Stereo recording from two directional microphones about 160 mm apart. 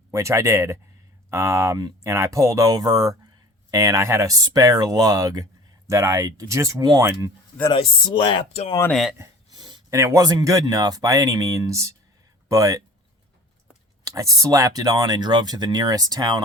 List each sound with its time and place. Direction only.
0.1 s speech: 20° right (ahead or behind)
7.7 s speech: 35° left (ahead or behind)
8.9 s speech: centre (ahead or behind)
9.1 s a sound: 15° right (ahead or behind)
9.6 s speech: 25° right (ahead or behind)
14.0 s speech: 20° right (ahead or behind)